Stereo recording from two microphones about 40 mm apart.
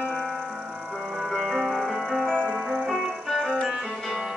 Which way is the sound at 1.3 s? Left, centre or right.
Centre.